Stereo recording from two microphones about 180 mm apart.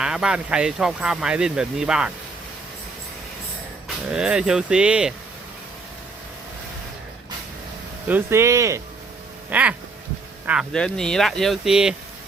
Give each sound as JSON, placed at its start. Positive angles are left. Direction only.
{"t": 0.0, "sound": "speech", "side_deg": -5}
{"t": 3.8, "sound": "speech", "side_deg": -5}
{"t": 8.0, "sound": "speech", "side_deg": -10}